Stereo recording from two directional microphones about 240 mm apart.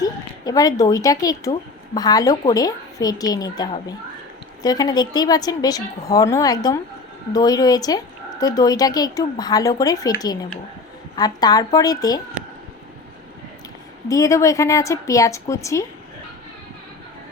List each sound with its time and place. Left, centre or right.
0.0 s a woman's voice: centre
11.2 s a woman's voice: centre
14.1 s a woman's voice: centre